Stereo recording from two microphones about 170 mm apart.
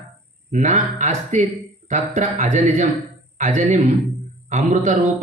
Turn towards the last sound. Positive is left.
turn(degrees=-45)  # may be behind; listen again after turning